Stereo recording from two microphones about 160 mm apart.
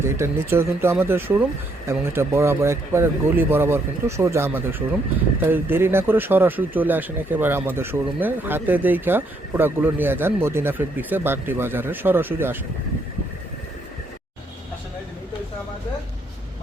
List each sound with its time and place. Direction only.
0.0 s speech: 15° right (ahead or behind)